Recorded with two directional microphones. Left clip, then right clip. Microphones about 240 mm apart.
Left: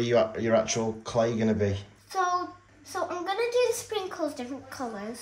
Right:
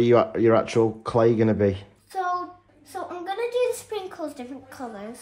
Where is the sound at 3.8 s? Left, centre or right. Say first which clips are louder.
Left 1 dB; centre.